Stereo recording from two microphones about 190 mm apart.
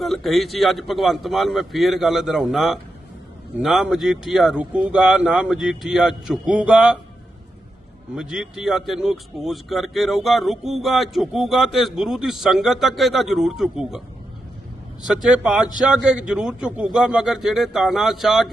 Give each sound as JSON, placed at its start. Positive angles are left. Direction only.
{"t": 0.0, "sound": "speech", "side_deg": 0}
{"t": 8.1, "sound": "speech", "side_deg": -5}
{"t": 15.0, "sound": "speech", "side_deg": -5}